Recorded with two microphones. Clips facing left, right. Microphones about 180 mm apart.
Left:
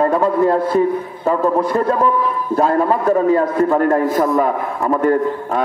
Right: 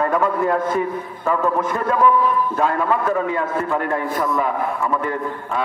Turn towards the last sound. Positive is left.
turn(degrees=45)  # may be behind; listen again after turning